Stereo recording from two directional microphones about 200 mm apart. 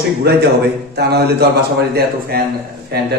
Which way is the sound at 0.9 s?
55° right (ahead or behind).